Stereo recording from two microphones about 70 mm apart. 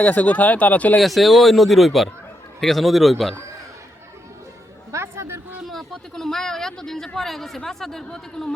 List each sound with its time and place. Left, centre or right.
0.0 s speech: centre
0.9 s speech: centre
4.9 s a sound: right
5.6 s speech: centre